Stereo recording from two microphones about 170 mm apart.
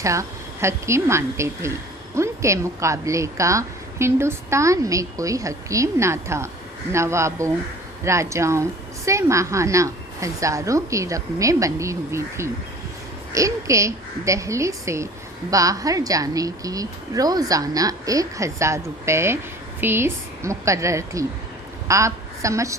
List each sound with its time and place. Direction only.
0.0 s a woman's voice: 20° right (ahead or behind)